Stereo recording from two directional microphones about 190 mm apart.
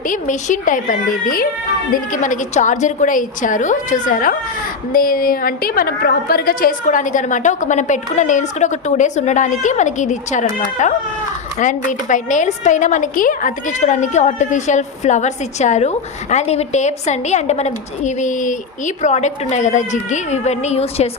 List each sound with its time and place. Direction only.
0.1 s a woman's voice: 40° left (ahead or behind)